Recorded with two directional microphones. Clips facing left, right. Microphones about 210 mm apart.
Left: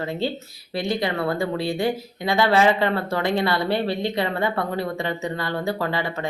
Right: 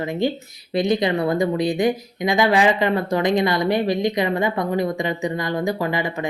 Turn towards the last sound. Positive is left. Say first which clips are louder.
# right 3 dB
turn(degrees=-15)  # may be behind; listen again after turning